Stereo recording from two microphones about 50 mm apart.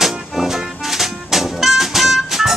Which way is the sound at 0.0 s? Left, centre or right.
Centre.